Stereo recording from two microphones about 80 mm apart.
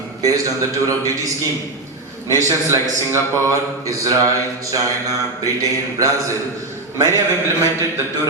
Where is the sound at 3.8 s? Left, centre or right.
Right.